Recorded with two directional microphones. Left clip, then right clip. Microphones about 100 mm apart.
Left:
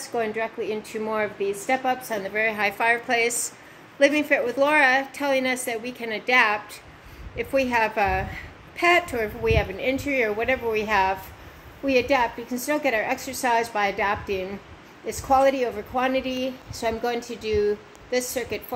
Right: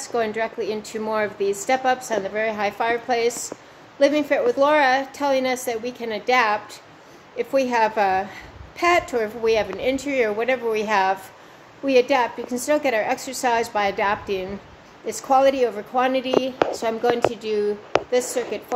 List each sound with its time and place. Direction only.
0.1 s a woman's voice: 25° right (ahead or behind)
0.6 s a woman's voice: 35° right (ahead or behind)
1.9 s a woman's voice: 20° right (ahead or behind)
16.8 s a woman's voice: 20° right (ahead or behind)